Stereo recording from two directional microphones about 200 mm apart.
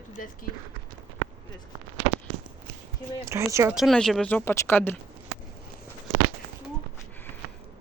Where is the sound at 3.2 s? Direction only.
15° right (ahead or behind).